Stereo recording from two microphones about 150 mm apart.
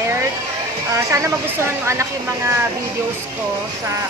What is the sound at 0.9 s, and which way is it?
Speech, 20° right (ahead or behind).